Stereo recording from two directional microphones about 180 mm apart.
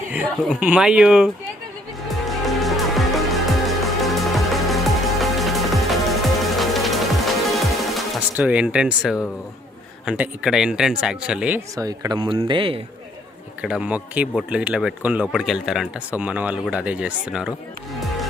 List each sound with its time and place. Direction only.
0.3 s speech: 5° right (ahead or behind)
2.5 s music: centre (ahead or behind)
8.4 s speech: 10° right (ahead or behind)
11.7 s speech: 20° right (ahead or behind)
13.6 s speech: 5° right (ahead or behind)